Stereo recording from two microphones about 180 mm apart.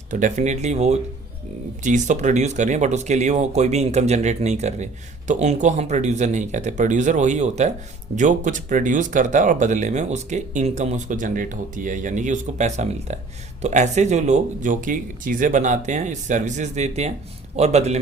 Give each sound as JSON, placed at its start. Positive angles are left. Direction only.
{"t": 0.1, "sound": "speech", "side_deg": -45}